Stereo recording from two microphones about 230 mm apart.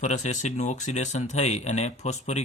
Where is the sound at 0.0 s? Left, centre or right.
Left.